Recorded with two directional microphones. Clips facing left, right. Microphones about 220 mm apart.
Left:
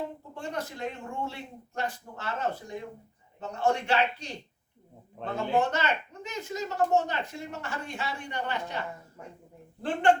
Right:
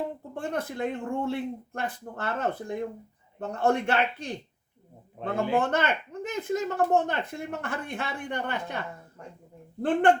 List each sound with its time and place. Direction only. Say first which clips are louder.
0.3 s speech: right 5 dB; 55° right (ahead or behind)